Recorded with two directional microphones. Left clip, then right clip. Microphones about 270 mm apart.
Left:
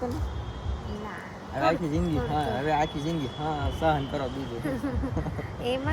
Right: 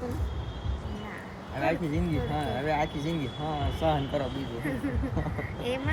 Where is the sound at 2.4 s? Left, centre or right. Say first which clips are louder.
Left 3 dB; centre.